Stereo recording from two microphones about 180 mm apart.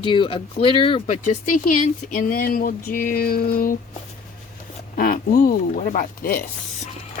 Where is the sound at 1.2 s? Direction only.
50° left (ahead or behind).